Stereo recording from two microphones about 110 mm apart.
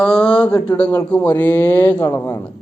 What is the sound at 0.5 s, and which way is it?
Speech, 40° left (ahead or behind).